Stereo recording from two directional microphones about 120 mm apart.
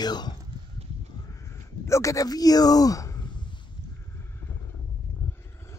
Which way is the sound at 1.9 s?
25° left (ahead or behind).